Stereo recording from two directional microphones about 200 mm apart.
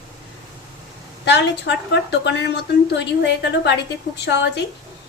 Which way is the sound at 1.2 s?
60° left (ahead or behind).